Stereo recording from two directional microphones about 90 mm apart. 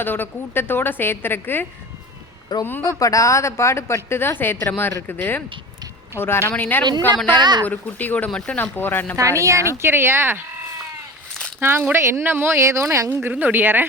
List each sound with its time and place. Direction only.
0.0 s a woman's voice: 25° left (ahead or behind)
2.5 s a woman's voice: 50° left (ahead or behind)
3.0 s a woman's voice: 40° left (ahead or behind); by 6.8 s 20° left (ahead or behind)
7.3 s speech: 55° right (ahead or behind)
7.6 s a woman's voice: 20° left (ahead or behind)
9.4 s a woman's voice: 35° right (ahead or behind)
9.7 s speech: 25° right (ahead or behind)
11.6 s speech: 25° right (ahead or behind)